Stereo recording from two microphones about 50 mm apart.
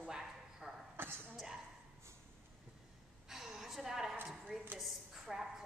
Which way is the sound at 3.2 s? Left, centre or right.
Centre.